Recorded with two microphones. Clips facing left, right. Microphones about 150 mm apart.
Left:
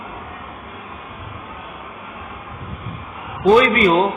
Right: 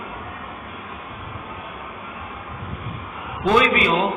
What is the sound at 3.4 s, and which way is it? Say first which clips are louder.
Speech: left 5 dB; 40° left (ahead or behind).